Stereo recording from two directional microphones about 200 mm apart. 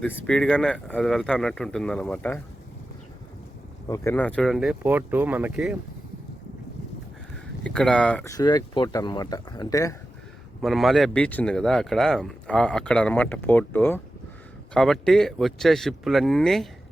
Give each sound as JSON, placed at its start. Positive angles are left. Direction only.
{"t": 0.0, "sound": "speech", "side_deg": 5}
{"t": 3.8, "sound": "speech", "side_deg": 15}
{"t": 7.6, "sound": "speech", "side_deg": 5}
{"t": 10.6, "sound": "speech", "side_deg": 0}